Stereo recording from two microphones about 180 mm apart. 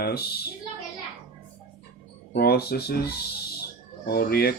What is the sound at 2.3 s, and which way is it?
Speech, 60° left (ahead or behind).